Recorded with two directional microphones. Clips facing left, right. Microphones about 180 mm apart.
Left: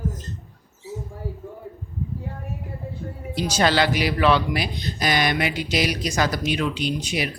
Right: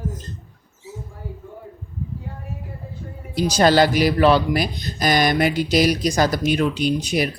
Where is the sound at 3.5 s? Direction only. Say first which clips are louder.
Right 5 dB; 40° right (ahead or behind).